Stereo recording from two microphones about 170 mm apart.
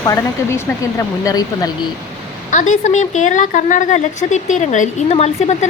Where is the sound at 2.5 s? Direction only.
45° left (ahead or behind).